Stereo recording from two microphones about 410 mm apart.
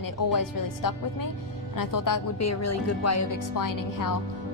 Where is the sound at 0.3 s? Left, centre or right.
Left.